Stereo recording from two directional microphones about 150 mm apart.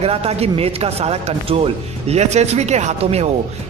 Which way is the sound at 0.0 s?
40° right (ahead or behind).